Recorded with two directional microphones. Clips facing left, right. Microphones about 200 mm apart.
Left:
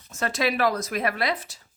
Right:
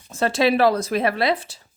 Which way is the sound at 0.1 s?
30° right (ahead or behind).